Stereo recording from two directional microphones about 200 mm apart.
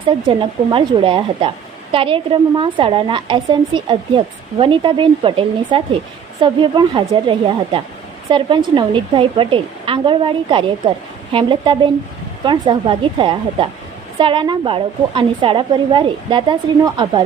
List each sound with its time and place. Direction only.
0.3 s a woman's voice: 25° right (ahead or behind)